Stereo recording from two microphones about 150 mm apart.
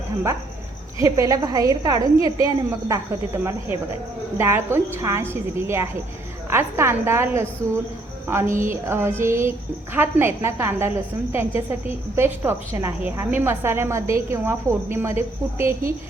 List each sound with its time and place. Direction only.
1.0 s a woman's voice: 20° right (ahead or behind)